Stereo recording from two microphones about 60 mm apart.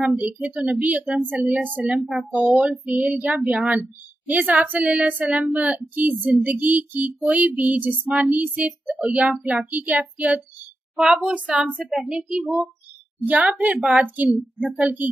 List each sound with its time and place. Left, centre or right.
0.1 s speech: right
2.0 s speech: centre
2.8 s speech: right
11.0 s speech: centre
13.3 s speech: right